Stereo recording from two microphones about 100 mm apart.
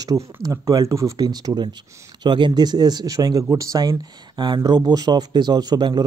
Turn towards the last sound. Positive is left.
turn(degrees=-40)  # may be behind; listen again after turning